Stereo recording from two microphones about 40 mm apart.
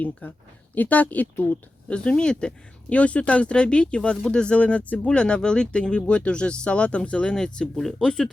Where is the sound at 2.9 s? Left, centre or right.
Left; by 8.3 s centre.